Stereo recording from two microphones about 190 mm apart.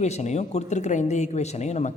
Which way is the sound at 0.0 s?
35° left (ahead or behind).